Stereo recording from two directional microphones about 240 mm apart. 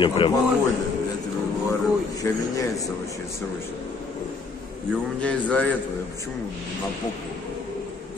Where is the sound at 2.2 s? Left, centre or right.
Centre.